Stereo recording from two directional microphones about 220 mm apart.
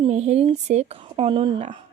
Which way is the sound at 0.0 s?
30° right (ahead or behind).